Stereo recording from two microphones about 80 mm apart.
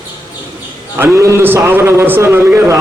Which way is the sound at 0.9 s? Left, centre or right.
Right.